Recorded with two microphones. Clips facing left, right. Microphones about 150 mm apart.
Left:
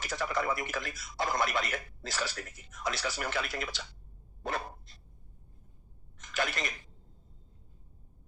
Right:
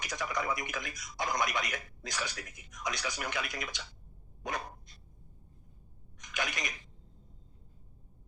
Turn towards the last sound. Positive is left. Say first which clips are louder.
# left 4 dB
turn(degrees=-15)  # may be behind; listen again after turning